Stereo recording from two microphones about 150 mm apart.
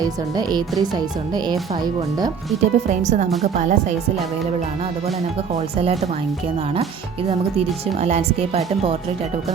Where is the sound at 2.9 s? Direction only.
50° right (ahead or behind).